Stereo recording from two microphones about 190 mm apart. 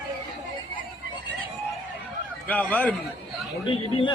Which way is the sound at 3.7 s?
25° left (ahead or behind).